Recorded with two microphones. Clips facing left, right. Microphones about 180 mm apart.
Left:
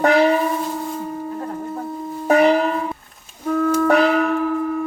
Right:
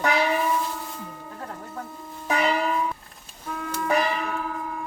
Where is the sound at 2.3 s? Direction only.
55° left (ahead or behind); by 4.3 s 70° left (ahead or behind).